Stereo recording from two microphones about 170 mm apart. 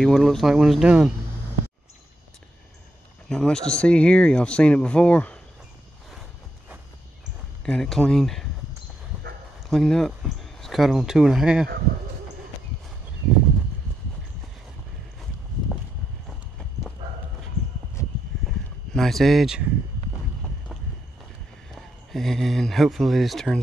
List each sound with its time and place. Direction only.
0.0 s speech: centre (ahead or behind)
3.3 s speech: 5° left (ahead or behind)
7.6 s speech: 5° left (ahead or behind)
9.7 s speech: 5° left (ahead or behind)
16.3 s clip-clop: centre (ahead or behind)
18.0 s a sound: 15° left (ahead or behind)
18.9 s speech: centre (ahead or behind)
21.7 s speech: centre (ahead or behind)